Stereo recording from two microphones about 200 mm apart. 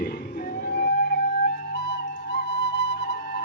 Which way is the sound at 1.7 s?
55° left (ahead or behind).